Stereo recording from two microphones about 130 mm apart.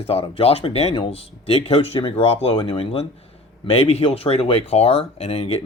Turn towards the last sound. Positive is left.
turn(degrees=50)  # may be behind; listen again after turning